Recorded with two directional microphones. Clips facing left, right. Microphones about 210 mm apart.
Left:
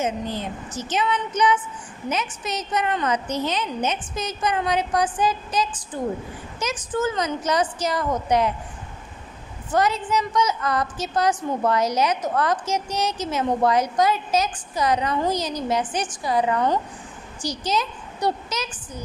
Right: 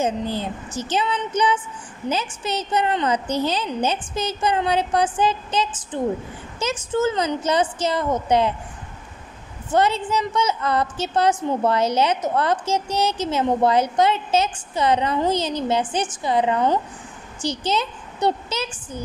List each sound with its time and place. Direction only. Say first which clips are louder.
0.0 s a woman's voice: right 3 dB; 30° right (ahead or behind)
9.8 s a woman's voice: right 2 dB; 30° right (ahead or behind)